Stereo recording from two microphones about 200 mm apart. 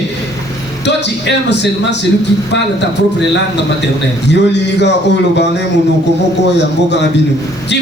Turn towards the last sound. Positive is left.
turn(degrees=60)  # may be behind; listen again after turning